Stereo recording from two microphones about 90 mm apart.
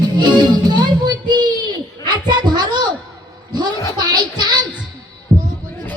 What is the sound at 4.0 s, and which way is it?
Music, 50° right (ahead or behind).